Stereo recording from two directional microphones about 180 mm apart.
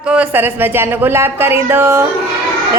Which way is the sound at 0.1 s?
10° right (ahead or behind).